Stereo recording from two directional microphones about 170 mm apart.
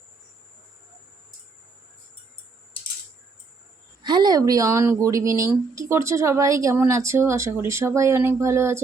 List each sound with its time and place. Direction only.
4.0 s speech: 25° right (ahead or behind)